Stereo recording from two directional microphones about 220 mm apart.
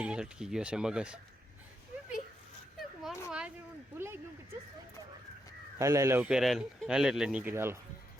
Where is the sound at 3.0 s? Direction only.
5° right (ahead or behind).